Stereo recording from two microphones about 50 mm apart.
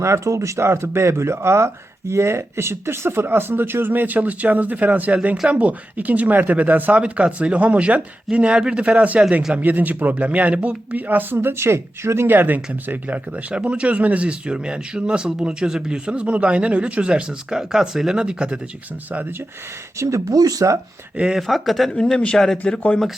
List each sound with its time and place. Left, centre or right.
0.0 s speech: right
9.6 s speech: right
11.3 s speech: right
12.3 s speech: right; by 18.6 s centre
20.0 s speech: right
21.3 s speech: centre
21.9 s speech: centre